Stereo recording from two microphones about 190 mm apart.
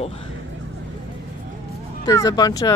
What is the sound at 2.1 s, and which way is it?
Speech, 20° left (ahead or behind).